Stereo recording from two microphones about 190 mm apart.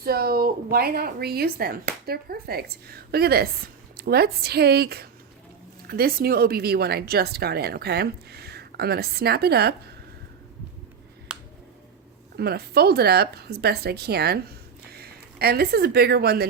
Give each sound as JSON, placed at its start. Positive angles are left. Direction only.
{"t": 0.0, "sound": "speech", "side_deg": -55}
{"t": 11.3, "sound": "a sound", "side_deg": -5}
{"t": 12.4, "sound": "speech", "side_deg": -55}